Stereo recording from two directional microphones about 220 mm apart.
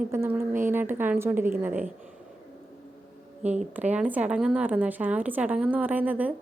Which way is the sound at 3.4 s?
30° right (ahead or behind).